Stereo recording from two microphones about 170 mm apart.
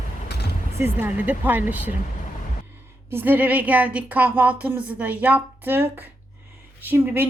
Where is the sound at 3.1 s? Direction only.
10° right (ahead or behind).